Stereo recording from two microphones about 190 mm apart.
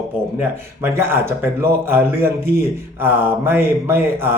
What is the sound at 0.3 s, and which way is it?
Speech, 10° right (ahead or behind).